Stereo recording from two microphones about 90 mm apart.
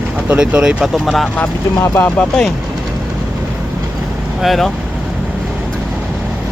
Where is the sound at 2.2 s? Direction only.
10° left (ahead or behind).